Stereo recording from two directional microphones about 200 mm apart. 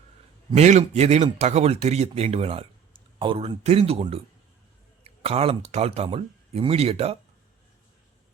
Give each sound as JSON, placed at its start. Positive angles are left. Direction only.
{"t": 0.5, "sound": "speech", "side_deg": -35}